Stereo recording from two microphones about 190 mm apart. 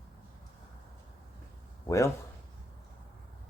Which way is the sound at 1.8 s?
15° left (ahead or behind).